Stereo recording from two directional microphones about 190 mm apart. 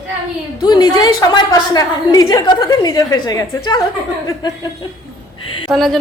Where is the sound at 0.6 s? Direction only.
20° left (ahead or behind).